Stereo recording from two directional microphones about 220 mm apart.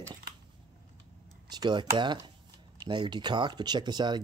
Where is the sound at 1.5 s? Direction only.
20° right (ahead or behind).